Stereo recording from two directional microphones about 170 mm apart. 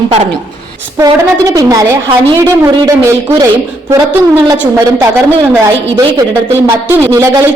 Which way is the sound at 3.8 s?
20° right (ahead or behind).